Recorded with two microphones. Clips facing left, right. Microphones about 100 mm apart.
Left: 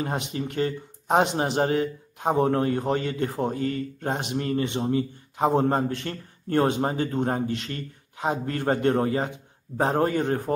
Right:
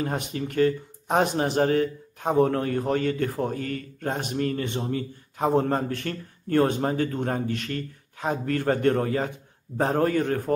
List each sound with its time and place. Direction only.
0.3 s speech: 25° left (ahead or behind)
2.1 s a sound: 15° left (ahead or behind)
2.4 s speech: 25° left (ahead or behind)